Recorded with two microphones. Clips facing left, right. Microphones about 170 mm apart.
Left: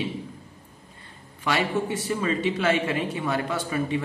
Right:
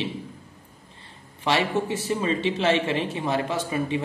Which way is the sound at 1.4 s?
25° right (ahead or behind).